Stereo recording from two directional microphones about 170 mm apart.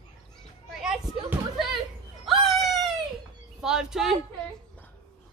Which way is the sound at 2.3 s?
Centre (ahead or behind).